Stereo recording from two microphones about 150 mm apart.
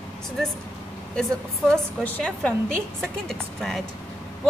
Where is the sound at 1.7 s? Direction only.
10° left (ahead or behind).